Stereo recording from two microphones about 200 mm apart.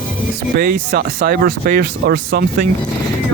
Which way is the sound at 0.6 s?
50° right (ahead or behind).